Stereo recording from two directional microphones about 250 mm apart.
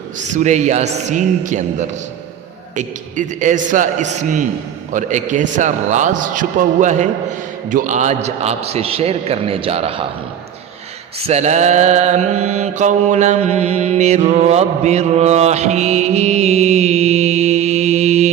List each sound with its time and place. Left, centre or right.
0.3 s mantra: right
2.7 s mantra: right
11.3 s mantra: right